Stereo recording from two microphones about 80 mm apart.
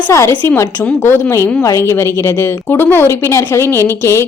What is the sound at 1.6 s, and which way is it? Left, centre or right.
A woman's voice, left.